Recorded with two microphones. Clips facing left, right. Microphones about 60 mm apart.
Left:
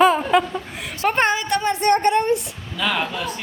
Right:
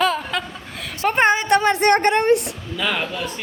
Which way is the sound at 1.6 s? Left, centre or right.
Right.